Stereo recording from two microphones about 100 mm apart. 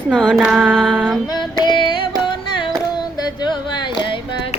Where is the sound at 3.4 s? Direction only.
50° left (ahead or behind).